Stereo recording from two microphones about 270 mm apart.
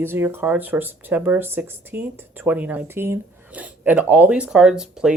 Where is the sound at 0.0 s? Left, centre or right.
Centre.